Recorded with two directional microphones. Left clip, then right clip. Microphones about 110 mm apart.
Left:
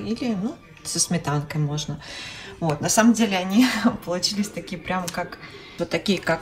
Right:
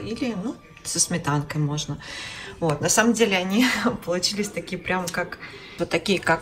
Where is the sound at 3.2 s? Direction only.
10° left (ahead or behind).